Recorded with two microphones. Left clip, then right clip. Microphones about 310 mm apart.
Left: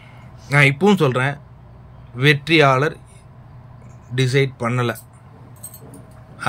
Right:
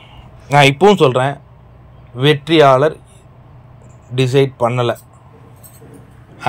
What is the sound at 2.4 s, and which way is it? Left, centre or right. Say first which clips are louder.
Speech: right 8 dB; centre.